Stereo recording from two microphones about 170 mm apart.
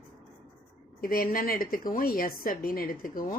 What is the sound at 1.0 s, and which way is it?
A woman's voice, 55° left (ahead or behind).